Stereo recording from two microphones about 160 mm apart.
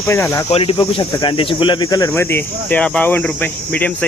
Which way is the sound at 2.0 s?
15° left (ahead or behind).